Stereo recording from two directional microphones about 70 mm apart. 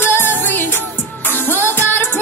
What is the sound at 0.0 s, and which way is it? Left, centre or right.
Music, left.